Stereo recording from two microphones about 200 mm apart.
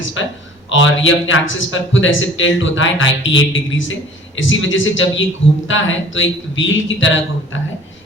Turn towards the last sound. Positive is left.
turn(degrees=75)  # may be behind; listen again after turning